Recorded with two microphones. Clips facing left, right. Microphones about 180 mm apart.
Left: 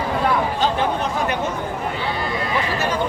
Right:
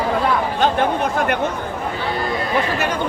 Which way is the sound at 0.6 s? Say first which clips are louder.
Right 3 dB; 55° right (ahead or behind).